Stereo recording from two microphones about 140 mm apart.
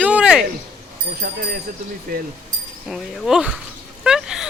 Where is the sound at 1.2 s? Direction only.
90° right.